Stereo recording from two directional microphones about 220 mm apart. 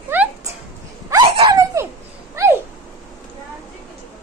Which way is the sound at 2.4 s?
15° right (ahead or behind).